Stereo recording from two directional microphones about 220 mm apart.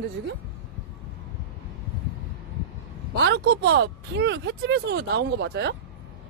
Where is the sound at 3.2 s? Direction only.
50° right (ahead or behind).